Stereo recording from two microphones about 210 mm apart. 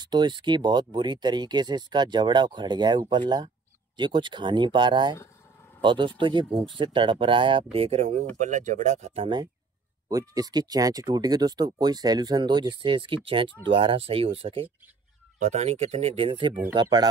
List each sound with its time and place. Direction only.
0.0 s speech: 20° right (ahead or behind)